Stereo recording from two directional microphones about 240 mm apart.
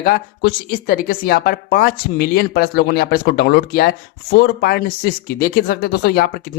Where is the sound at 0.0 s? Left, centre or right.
Left.